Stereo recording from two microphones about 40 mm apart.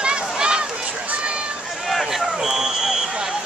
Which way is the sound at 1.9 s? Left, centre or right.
Centre.